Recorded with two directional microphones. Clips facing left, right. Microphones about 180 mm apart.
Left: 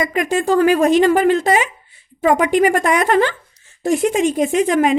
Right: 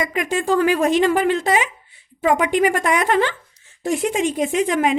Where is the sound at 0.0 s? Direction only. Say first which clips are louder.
Left 4 dB; 45° left (ahead or behind).